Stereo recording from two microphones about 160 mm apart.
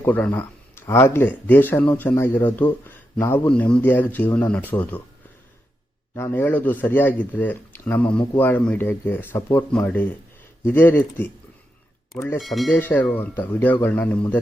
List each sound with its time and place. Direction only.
0.0 s speech: 10° left (ahead or behind)
6.1 s speech: 15° left (ahead or behind)
12.4 s speech: centre (ahead or behind)
12.7 s speech: 10° left (ahead or behind)